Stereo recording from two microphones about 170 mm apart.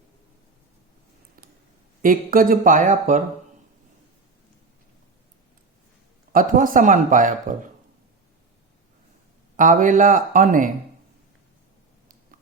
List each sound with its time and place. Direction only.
2.0 s speech: 55° right (ahead or behind)
6.3 s speech: 55° right (ahead or behind)
9.6 s speech: 50° right (ahead or behind)